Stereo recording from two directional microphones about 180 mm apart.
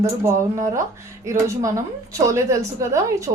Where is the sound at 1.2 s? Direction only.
15° right (ahead or behind).